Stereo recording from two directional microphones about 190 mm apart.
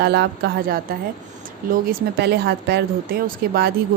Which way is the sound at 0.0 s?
60° right (ahead or behind).